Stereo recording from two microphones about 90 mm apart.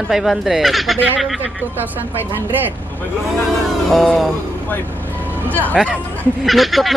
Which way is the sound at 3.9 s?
Centre (ahead or behind).